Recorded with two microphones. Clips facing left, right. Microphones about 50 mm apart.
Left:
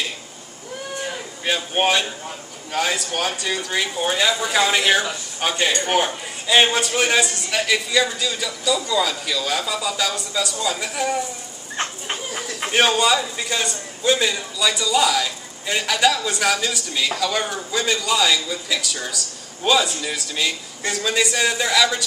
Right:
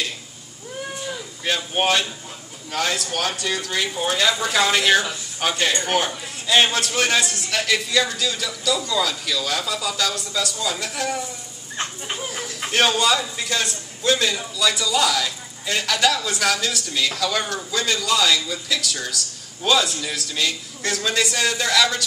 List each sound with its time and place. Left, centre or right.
1.4 s a man's voice: centre
11.7 s dog: left
12.4 s a man's voice: centre